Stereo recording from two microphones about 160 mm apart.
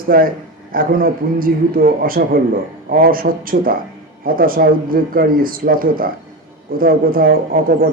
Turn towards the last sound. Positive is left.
turn(degrees=-65)  # may be behind; listen again after turning